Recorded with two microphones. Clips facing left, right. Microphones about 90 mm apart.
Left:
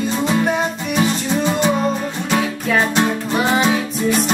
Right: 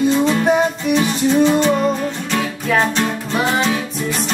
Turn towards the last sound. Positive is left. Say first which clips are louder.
# left 4 dB
turn(degrees=15)  # may be behind; listen again after turning